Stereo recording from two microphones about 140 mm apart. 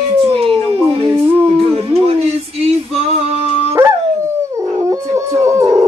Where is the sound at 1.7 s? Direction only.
45° right (ahead or behind).